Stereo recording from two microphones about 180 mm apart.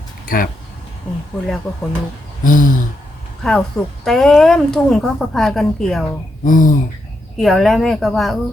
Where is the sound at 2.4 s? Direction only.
50° left (ahead or behind).